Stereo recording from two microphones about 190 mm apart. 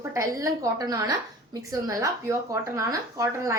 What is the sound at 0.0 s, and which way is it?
A woman's voice, 15° right (ahead or behind).